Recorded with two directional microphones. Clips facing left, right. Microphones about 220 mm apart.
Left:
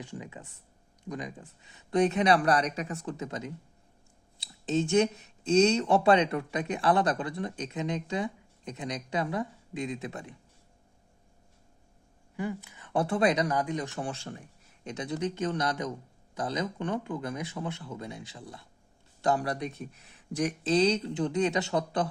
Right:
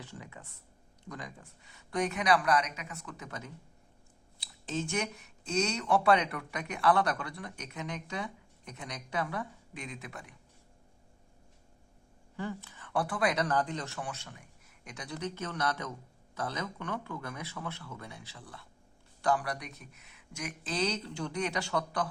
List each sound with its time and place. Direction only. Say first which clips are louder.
0.0 s speech: left 6 dB; 15° left (ahead or behind)
12.4 s speech: left 4 dB; 15° left (ahead or behind)
14.0 s speech: left 6 dB; 30° left (ahead or behind)
20.7 s speech: left 8 dB; 20° left (ahead or behind)